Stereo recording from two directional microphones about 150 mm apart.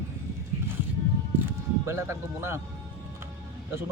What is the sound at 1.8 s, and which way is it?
Speech, 20° right (ahead or behind).